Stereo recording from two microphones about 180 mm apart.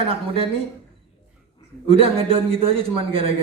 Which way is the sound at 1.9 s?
30° right (ahead or behind).